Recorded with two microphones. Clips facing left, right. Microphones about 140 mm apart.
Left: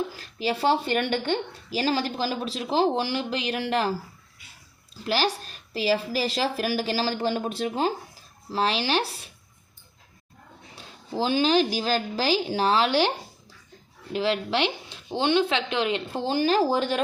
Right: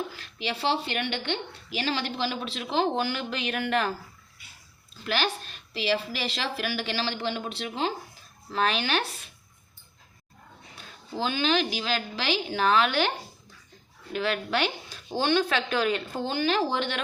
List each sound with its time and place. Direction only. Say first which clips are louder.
0.2 s speech: left 5 dB; 40° left (ahead or behind)
5.0 s speech: left 3 dB; 35° left (ahead or behind)
8.4 s speech: left 2 dB; 30° left (ahead or behind)
10.8 s speech: left 4 dB; 30° left (ahead or behind)